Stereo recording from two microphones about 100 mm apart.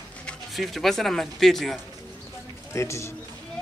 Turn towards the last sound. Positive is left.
turn(degrees=30)  # may be behind; listen again after turning